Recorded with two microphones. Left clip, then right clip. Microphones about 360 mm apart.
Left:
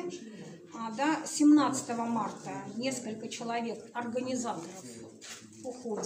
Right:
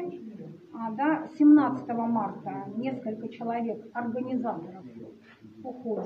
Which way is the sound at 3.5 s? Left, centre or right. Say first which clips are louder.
Right 4 dB; right.